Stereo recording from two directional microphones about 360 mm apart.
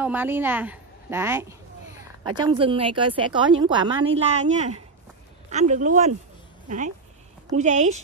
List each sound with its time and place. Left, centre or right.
0.0 s a woman's voice: centre
7.5 s speech: centre